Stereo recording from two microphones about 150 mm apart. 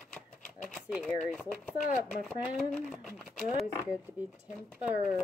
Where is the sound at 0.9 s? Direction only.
5° right (ahead or behind).